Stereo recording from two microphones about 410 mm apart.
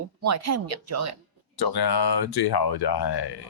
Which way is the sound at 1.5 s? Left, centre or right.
Left.